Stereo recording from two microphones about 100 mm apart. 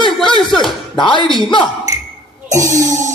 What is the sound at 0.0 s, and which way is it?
Slap, 55° left (ahead or behind).